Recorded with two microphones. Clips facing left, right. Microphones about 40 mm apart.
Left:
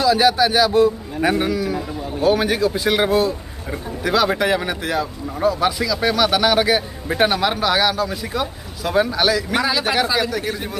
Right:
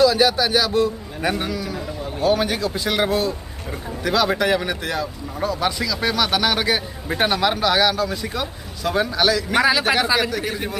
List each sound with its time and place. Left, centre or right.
0.0 s a man's voice: centre
9.6 s speech: centre
9.8 s a man's voice: centre